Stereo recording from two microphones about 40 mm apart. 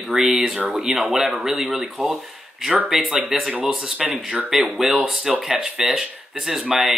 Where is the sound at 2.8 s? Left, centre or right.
Centre.